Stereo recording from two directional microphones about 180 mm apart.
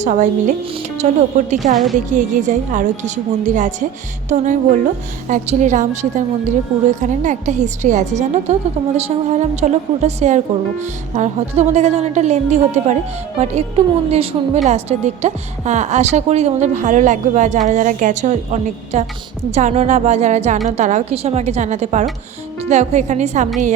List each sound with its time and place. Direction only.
0.0 s a woman's voice: 45° right (ahead or behind)
1.7 s a woman's voice: centre (ahead or behind)
2.1 s a woman's voice: 45° right (ahead or behind)